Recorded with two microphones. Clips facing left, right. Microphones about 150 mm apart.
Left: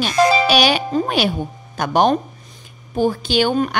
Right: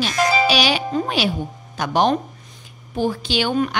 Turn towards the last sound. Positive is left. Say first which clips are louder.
# left 3 dB
turn(degrees=40)  # may be behind; listen again after turning